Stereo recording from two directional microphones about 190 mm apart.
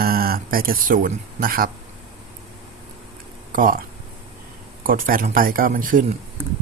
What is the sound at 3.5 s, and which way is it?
Speech, 45° right (ahead or behind).